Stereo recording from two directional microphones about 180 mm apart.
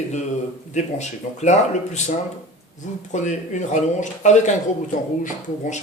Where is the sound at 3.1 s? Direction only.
45° left (ahead or behind).